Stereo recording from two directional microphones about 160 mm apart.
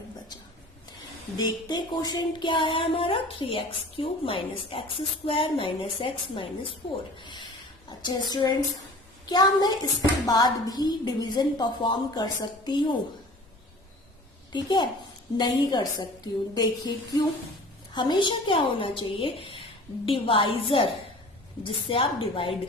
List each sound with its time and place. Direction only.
1.4 s music: 25° left (ahead or behind)
7.2 s a woman's voice: 30° left (ahead or behind)
14.5 s a woman's voice: 25° left (ahead or behind)
17.9 s music: 30° left (ahead or behind)